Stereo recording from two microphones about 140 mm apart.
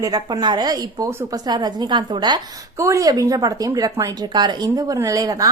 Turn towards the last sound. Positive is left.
turn(degrees=-25)  # may be behind; listen again after turning